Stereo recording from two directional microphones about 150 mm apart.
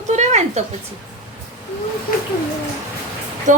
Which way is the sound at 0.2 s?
50° right (ahead or behind).